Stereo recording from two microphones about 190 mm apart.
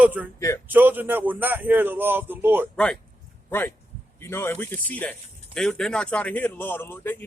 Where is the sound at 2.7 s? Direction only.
5° left (ahead or behind).